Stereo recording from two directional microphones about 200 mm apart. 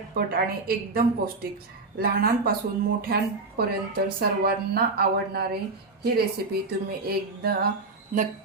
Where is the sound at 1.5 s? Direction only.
45° right (ahead or behind).